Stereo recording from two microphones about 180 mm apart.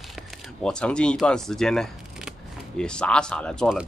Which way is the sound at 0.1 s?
5° left (ahead or behind).